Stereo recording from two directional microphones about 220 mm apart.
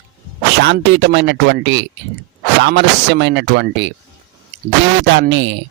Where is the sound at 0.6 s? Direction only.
50° right (ahead or behind).